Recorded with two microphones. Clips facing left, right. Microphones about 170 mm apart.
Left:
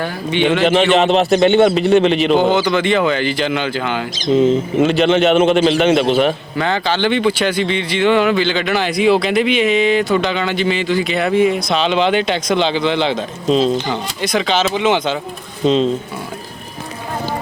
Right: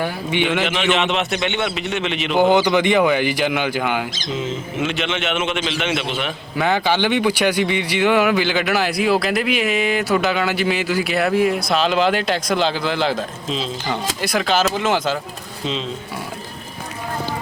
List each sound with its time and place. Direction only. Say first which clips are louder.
0.0 s speech: left 4 dB; 15° right (ahead or behind)
0.6 s a man's voice: left 7 dB; 40° left (ahead or behind)
2.4 s speech: even; 15° right (ahead or behind)
4.4 s a man's voice: left 12 dB; 35° left (ahead or behind)
6.6 s speech: even; 10° right (ahead or behind)
13.5 s speech: left 13 dB; 45° left (ahead or behind)
13.9 s speech: left 3 dB; 5° right (ahead or behind)
15.6 s a man's voice: left 12 dB; 40° left (ahead or behind)